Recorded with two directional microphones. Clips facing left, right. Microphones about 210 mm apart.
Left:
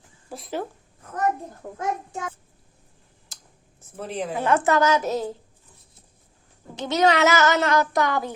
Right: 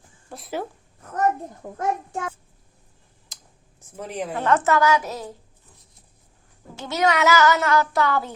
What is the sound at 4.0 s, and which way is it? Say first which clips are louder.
Speech: even; 10° right (ahead or behind).